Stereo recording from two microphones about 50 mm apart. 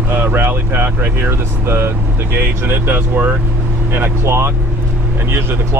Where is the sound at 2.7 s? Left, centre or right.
Right.